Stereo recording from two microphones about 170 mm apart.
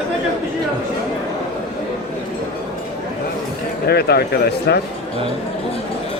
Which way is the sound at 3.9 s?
70° left (ahead or behind).